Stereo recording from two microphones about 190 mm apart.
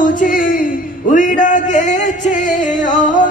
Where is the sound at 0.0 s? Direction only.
45° left (ahead or behind).